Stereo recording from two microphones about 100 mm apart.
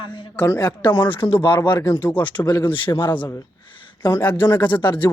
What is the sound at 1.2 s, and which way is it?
Speech, 55° left (ahead or behind).